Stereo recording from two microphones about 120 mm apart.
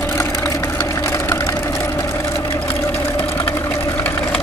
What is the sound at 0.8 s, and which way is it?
Vehicle, 25° left (ahead or behind).